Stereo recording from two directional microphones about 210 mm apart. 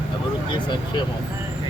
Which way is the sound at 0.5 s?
20° left (ahead or behind).